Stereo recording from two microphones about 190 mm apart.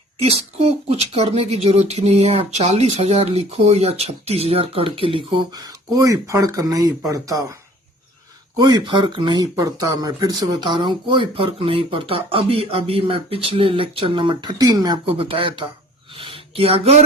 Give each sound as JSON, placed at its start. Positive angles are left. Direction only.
{"t": 0.2, "sound": "speech", "side_deg": -35}
{"t": 8.5, "sound": "speech", "side_deg": -20}
{"t": 16.1, "sound": "a sound", "side_deg": -30}